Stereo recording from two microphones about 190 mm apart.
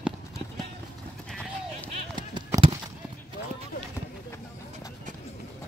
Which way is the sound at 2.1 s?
25° right (ahead or behind).